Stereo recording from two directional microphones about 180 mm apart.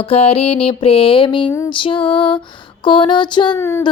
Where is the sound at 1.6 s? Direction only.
30° left (ahead or behind).